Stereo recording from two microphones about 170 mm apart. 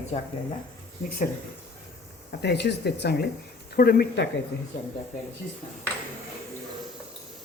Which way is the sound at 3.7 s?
65° left (ahead or behind).